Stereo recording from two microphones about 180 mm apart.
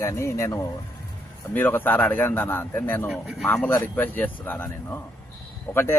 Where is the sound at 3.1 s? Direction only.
5° right (ahead or behind).